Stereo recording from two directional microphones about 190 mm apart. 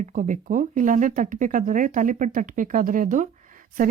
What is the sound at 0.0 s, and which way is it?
Speech, 40° right (ahead or behind).